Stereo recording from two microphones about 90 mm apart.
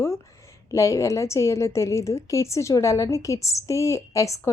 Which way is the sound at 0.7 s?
35° left (ahead or behind).